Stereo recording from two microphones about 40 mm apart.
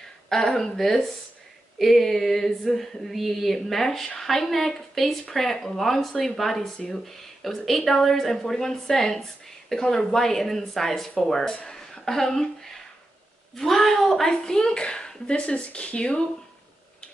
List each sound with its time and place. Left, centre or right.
0.3 s a woman's voice: centre; by 16.3 s left